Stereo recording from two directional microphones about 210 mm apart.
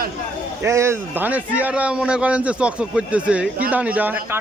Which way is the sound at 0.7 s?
15° right (ahead or behind).